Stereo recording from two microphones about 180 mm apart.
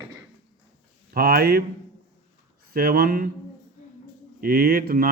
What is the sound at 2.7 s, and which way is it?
Speech, 55° right (ahead or behind).